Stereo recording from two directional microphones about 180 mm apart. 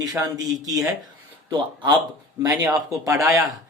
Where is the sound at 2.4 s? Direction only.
20° right (ahead or behind).